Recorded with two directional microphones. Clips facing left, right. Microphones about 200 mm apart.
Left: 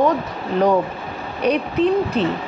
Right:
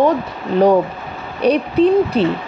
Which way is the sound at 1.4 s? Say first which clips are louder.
Right 4 dB; 35° right (ahead or behind).